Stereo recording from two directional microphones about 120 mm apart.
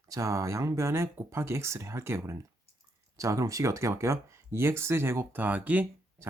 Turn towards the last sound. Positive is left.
turn(degrees=-15)  # may be behind; listen again after turning